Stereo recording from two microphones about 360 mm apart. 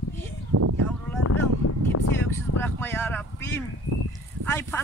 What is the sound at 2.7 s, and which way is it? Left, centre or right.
Speech, centre.